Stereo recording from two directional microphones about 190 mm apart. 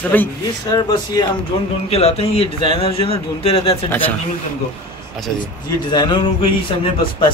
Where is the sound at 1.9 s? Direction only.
30° left (ahead or behind).